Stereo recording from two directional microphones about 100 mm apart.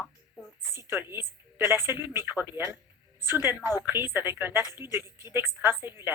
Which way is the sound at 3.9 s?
25° right (ahead or behind).